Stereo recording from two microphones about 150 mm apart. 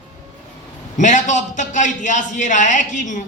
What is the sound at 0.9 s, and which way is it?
A man's voice, 55° left (ahead or behind).